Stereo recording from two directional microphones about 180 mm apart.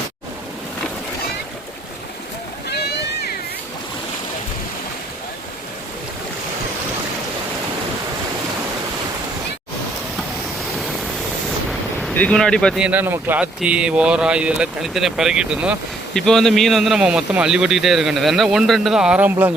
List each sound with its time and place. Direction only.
2.6 s boat: 65° left (ahead or behind)
11.7 s ocean: 5° left (ahead or behind)
12.8 s speech: 10° right (ahead or behind)